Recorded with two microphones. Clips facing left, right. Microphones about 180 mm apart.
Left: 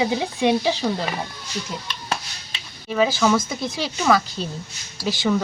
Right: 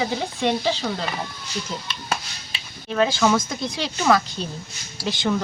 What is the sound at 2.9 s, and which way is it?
Speech, centre (ahead or behind).